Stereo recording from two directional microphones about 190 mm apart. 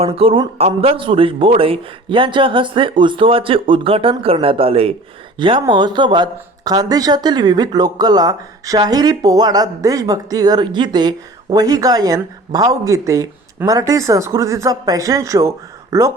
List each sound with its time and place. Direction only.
0.0 s speech: 30° right (ahead or behind)